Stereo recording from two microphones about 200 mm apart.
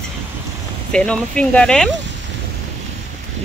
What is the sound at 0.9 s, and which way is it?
Speech, 5° left (ahead or behind).